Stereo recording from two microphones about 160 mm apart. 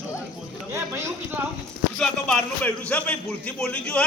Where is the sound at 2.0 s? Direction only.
5° left (ahead or behind).